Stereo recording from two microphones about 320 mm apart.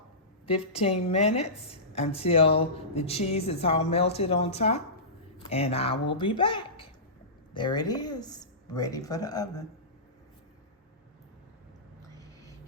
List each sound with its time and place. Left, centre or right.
0.7 s speech: centre